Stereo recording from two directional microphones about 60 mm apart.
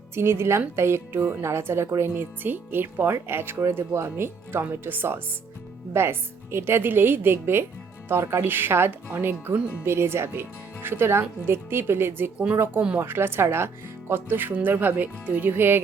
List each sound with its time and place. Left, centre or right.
0.1 s a woman's voice: right
2.0 s speech: right
4.0 s a woman's voice: right